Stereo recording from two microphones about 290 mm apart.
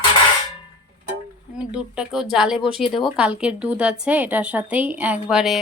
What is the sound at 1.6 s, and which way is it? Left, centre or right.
A woman's voice, centre.